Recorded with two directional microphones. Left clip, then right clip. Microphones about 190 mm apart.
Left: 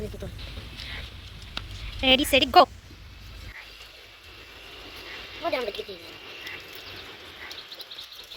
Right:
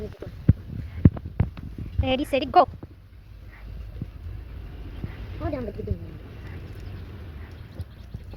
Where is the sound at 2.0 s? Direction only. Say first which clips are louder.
Left 5 dB; 5° left (ahead or behind).